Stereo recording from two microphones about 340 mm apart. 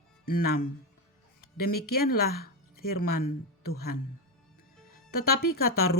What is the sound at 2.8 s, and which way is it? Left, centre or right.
Speech, left.